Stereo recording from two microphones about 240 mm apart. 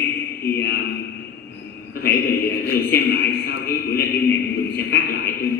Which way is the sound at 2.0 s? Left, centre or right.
Left.